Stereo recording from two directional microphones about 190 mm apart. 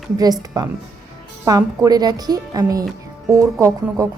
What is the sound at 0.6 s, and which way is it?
A woman's voice, 20° right (ahead or behind).